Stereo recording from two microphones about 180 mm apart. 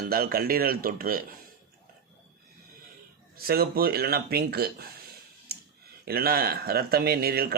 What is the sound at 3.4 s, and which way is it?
A man's voice, 60° right (ahead or behind).